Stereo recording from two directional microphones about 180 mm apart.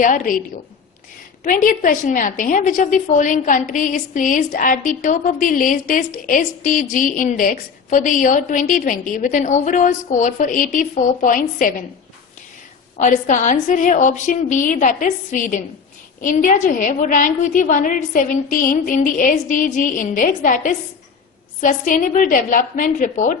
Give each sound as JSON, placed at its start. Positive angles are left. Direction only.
{"t": 0.0, "sound": "a woman's voice", "side_deg": 45}
{"t": 1.5, "sound": "a woman's voice", "side_deg": 50}
{"t": 13.0, "sound": "a woman's voice", "side_deg": 45}